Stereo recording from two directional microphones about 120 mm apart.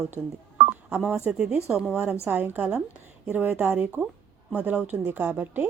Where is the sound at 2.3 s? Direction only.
15° right (ahead or behind).